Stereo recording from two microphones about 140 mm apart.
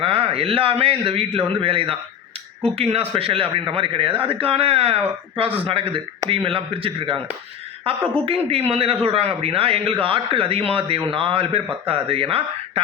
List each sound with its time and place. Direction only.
0.0 s a man's voice: 45° right (ahead or behind)
8.2 s a man's voice: 45° right (ahead or behind)